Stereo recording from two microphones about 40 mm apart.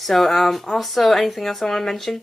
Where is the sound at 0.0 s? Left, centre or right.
Centre.